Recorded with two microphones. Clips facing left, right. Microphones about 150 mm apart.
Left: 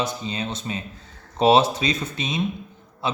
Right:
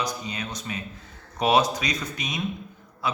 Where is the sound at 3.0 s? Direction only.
25° left (ahead or behind).